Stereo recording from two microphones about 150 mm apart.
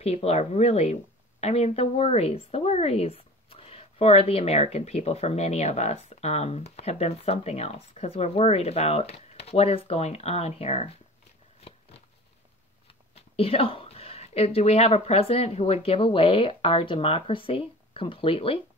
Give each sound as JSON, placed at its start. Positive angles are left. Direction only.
{"t": 0.0, "sound": "a woman's voice", "side_deg": 45}
{"t": 13.1, "sound": "a woman's voice", "side_deg": 40}